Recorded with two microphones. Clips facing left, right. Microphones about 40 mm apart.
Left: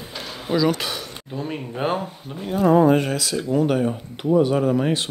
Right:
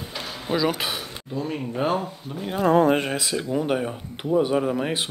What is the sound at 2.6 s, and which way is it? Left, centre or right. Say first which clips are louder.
Speech: left 2 dB; right.